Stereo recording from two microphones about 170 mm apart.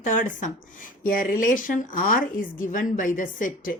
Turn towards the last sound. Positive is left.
turn(degrees=55)  # may be behind; listen again after turning